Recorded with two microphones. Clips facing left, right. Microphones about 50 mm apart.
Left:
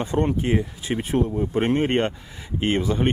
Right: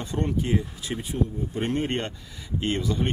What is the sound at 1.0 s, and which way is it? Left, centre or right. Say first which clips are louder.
Speech: left 6 dB; left.